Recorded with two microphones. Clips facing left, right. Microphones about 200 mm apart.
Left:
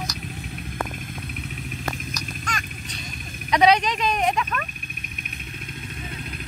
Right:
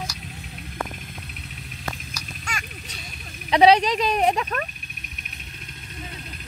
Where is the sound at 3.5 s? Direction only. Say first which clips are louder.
Right 3 dB; 30° right (ahead or behind).